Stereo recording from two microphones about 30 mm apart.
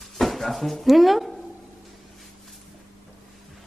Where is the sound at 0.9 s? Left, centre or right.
Centre.